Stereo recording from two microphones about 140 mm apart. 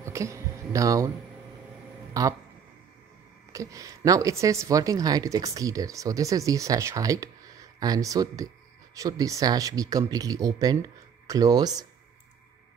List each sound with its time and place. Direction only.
0.0 s a sound: 20° right (ahead or behind)
2.1 s speech: 25° right (ahead or behind)
3.5 s a woman's voice: 25° right (ahead or behind)